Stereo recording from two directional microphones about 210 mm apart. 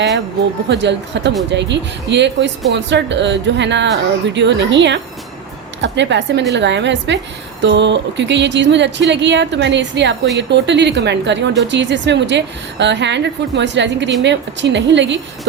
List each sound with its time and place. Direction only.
0.7 s speech: 55° right (ahead or behind)